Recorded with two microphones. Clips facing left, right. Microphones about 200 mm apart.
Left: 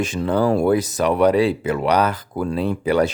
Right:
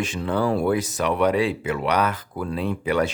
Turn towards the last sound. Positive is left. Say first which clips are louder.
# left 4 dB
turn(degrees=35)  # may be behind; listen again after turning